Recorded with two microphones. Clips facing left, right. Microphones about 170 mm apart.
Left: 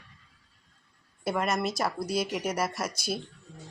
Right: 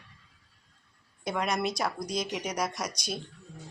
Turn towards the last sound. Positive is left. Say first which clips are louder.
# left 3 dB
turn(degrees=5)  # may be behind; listen again after turning